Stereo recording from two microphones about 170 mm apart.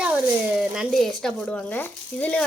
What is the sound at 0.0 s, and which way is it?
Speech, 10° right (ahead or behind).